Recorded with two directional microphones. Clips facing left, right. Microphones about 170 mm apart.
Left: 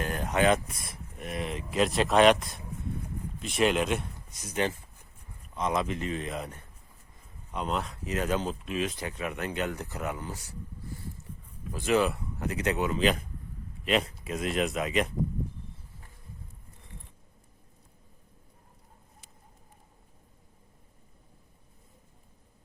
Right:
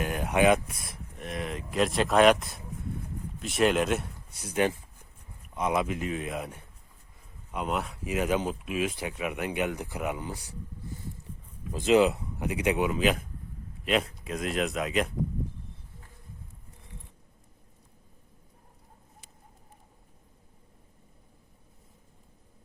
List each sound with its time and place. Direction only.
0.0 s speech: 10° right (ahead or behind)
11.7 s speech: 20° right (ahead or behind); by 15.1 s centre (ahead or behind)